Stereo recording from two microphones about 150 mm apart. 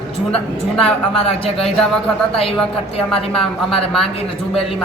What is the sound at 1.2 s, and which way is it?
Speech, 40° left (ahead or behind).